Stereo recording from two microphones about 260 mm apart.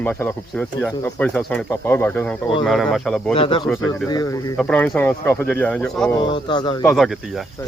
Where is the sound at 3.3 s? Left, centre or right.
Left.